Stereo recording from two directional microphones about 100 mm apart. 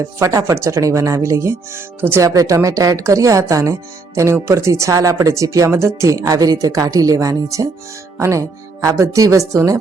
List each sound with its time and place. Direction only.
0.0 s speech: 35° right (ahead or behind)